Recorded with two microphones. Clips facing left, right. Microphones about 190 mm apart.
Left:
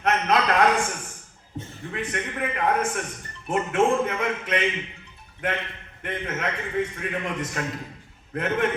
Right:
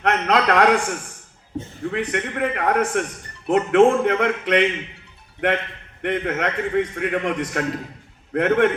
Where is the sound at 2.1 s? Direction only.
70° right (ahead or behind).